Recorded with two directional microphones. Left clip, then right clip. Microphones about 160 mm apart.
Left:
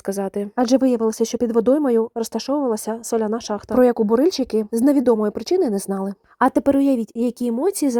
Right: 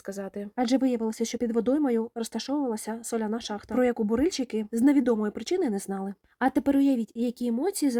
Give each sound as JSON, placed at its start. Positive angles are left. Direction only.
{"t": 0.0, "sound": "speech", "side_deg": 35}
{"t": 5.9, "sound": "a woman's voice", "side_deg": 5}
{"t": 6.4, "sound": "speech", "side_deg": 30}